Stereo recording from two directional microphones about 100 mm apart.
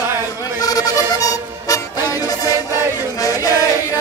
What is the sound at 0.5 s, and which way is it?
Music, 40° left (ahead or behind).